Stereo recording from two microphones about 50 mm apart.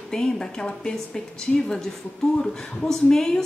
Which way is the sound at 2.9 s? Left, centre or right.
Centre.